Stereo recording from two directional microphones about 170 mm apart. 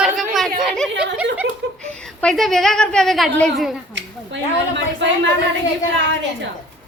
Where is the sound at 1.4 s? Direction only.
80° right.